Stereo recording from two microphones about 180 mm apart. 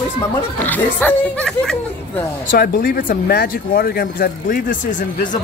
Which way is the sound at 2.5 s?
50° left (ahead or behind).